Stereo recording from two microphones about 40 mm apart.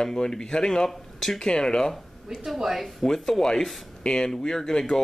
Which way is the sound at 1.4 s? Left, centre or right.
Centre.